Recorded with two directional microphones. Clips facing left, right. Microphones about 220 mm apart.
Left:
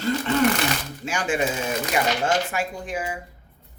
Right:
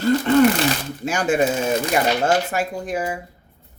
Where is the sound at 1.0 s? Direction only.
40° right (ahead or behind).